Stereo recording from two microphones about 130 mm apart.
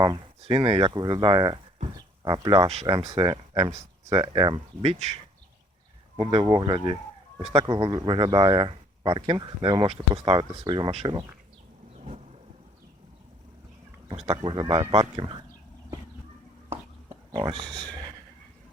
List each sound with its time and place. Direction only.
0.4 s speech: 50° right (ahead or behind)
6.1 s speech: 45° right (ahead or behind)
11.9 s vehicle: 60° right (ahead or behind)
14.4 s speech: 35° right (ahead or behind)
17.3 s speech: 40° right (ahead or behind)
17.7 s speech: 5° left (ahead or behind)